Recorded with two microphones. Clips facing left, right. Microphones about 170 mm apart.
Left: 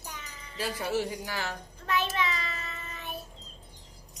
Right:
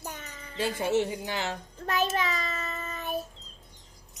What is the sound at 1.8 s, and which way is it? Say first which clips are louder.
Child singing: right 2 dB; 40° right (ahead or behind).